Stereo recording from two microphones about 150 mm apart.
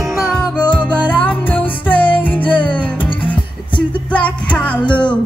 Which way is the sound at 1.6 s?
35° left (ahead or behind).